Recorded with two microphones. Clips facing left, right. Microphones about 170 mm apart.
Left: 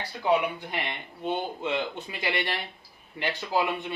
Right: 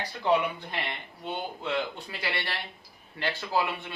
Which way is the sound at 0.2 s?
10° left (ahead or behind).